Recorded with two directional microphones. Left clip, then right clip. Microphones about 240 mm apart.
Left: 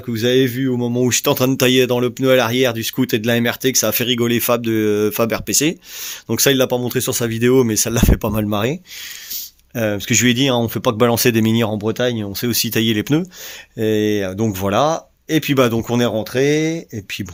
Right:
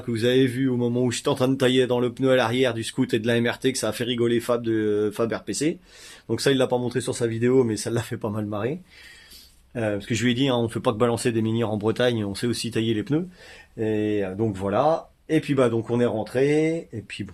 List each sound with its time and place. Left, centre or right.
0.1 s speech: left
9.7 s speech: left
13.7 s speech: left